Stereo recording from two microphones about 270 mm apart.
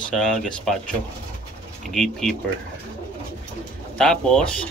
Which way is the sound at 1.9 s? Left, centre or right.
Centre.